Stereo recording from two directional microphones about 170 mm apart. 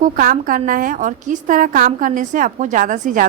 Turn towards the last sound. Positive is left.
turn(degrees=-50)  # may be behind; listen again after turning